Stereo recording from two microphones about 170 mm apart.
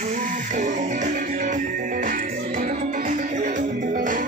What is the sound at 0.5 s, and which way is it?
Music, 45° right (ahead or behind).